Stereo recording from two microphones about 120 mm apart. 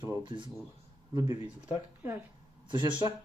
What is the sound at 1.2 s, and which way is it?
Speech, 55° left (ahead or behind).